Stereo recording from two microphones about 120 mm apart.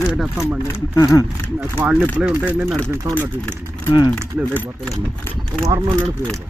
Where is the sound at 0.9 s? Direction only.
30° left (ahead or behind).